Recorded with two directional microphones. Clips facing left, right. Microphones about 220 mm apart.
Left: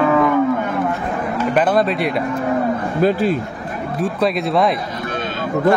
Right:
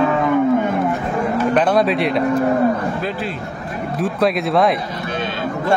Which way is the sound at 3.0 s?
45° left (ahead or behind).